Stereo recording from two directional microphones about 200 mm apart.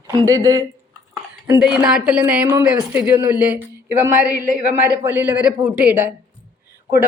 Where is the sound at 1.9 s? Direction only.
5° right (ahead or behind).